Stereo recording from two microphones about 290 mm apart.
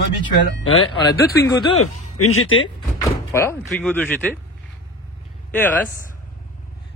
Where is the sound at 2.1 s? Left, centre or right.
Left.